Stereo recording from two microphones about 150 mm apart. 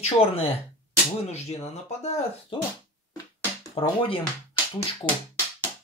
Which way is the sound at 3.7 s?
35° left (ahead or behind).